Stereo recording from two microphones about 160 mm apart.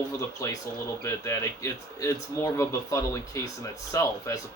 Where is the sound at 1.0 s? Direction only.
15° left (ahead or behind).